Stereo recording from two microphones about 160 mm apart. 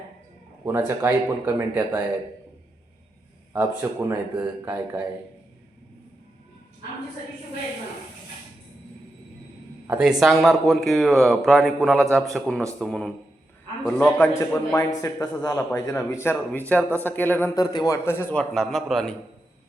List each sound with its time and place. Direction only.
0.6 s a man's voice: 15° right (ahead or behind)
3.5 s a man's voice: 10° right (ahead or behind)
9.8 s a man's voice: 10° right (ahead or behind); by 17.5 s 10° left (ahead or behind)
17.5 s a man's voice: 25° left (ahead or behind)
18.5 s speech: centre (ahead or behind)